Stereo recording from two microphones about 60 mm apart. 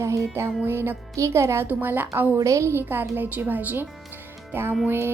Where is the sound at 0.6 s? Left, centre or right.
Right.